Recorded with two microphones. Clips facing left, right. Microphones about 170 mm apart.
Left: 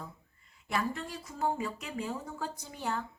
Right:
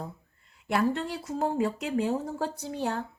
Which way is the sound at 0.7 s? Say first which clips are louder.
Right 7 dB; 70° right (ahead or behind).